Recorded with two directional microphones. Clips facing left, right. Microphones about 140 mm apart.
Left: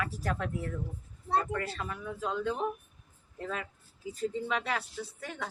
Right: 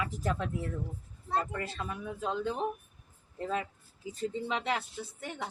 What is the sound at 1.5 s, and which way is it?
A woman's voice, 20° right (ahead or behind).